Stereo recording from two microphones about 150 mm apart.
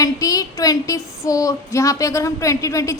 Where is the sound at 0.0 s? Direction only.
25° left (ahead or behind).